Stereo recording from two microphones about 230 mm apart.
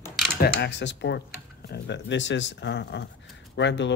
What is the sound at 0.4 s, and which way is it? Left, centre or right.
Speech, left.